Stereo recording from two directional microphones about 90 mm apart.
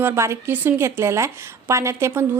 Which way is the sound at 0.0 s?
30° right (ahead or behind).